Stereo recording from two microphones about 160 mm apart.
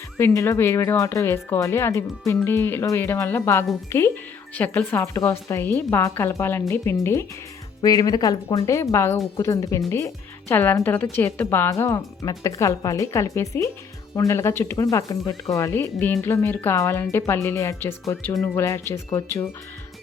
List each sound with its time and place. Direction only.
0.2 s speech: 15° left (ahead or behind)